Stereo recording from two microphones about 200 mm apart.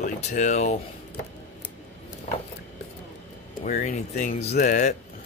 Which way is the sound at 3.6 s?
40° left (ahead or behind).